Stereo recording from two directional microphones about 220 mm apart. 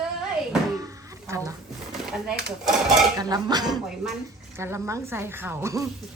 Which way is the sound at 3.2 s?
15° right (ahead or behind).